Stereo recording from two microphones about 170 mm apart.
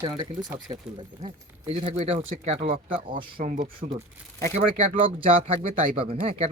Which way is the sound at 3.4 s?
45° right (ahead or behind).